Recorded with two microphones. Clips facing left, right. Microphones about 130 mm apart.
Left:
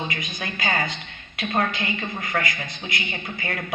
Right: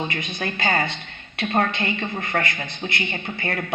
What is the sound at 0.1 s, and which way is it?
A woman's voice, 30° right (ahead or behind).